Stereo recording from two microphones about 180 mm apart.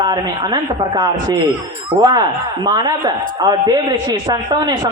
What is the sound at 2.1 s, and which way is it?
A woman's voice, 25° right (ahead or behind).